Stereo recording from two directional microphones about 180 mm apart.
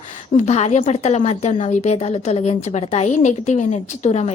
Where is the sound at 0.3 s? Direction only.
40° left (ahead or behind).